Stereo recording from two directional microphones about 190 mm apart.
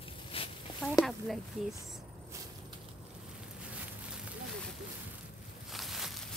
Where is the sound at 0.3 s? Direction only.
30° left (ahead or behind).